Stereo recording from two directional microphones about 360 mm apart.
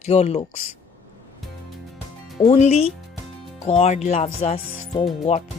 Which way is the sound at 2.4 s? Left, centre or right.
Centre.